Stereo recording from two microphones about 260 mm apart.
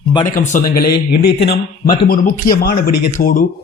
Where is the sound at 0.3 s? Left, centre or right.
Left.